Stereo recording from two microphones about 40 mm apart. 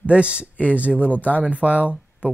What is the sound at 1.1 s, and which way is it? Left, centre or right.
Speech, left.